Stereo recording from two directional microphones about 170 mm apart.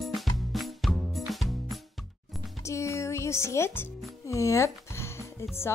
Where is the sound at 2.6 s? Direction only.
15° left (ahead or behind).